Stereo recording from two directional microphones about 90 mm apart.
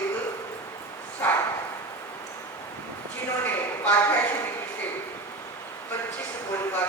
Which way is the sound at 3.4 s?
20° left (ahead or behind).